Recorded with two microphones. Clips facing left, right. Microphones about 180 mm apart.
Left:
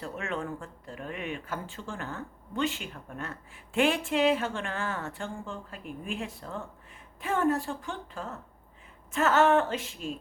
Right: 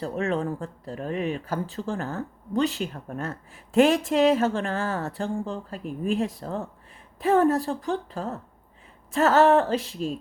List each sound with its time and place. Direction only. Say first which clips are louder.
0.0 s speech: right 8 dB; 35° right (ahead or behind)